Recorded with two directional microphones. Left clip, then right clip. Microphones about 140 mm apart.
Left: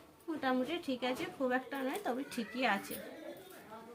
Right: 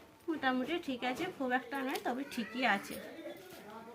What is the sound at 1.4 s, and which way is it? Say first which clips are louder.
Speech: left 1 dB; 10° left (ahead or behind).